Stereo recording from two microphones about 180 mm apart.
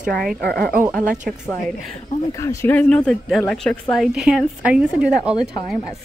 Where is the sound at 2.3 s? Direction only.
15° left (ahead or behind); by 6.0 s centre (ahead or behind).